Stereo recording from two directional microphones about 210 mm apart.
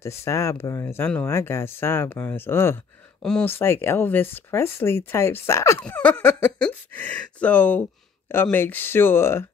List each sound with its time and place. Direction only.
0.0 s speech: 15° left (ahead or behind)